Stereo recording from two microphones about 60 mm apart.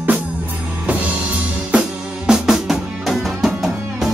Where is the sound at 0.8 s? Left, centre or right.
Right.